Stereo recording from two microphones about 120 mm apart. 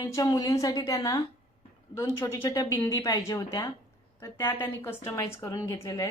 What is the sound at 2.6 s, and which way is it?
A woman's voice, 40° left (ahead or behind).